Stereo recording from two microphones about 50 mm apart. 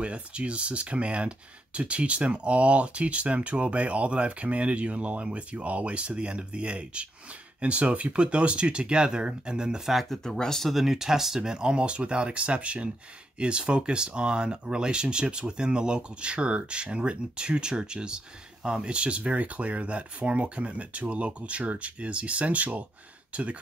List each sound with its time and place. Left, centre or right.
0.0 s speech: right
10.0 s speech: centre
10.7 s speech: centre; by 23.6 s right